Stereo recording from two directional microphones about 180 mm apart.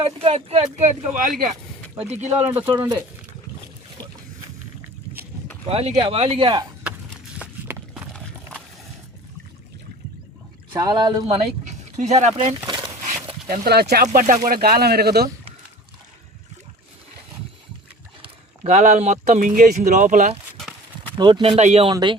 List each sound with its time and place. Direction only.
0.0 s speech: 30° right (ahead or behind)
2.3 s speech: 10° right (ahead or behind)
2.7 s speech: 20° right (ahead or behind)
5.6 s speech: 35° right (ahead or behind)
7.3 s a sound: 5° right (ahead or behind)
10.7 s speech: 25° right (ahead or behind)
11.6 s speech: 40° right (ahead or behind)
13.5 s speech: 65° right (ahead or behind)
18.2 s speech: 40° right (ahead or behind)
20.6 s a sound: centre (ahead or behind)
21.2 s speech: 25° right (ahead or behind)
21.8 s speech: 25° right (ahead or behind)